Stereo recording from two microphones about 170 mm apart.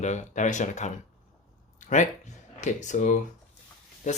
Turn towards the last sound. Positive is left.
turn(degrees=45)  # may be behind; listen again after turning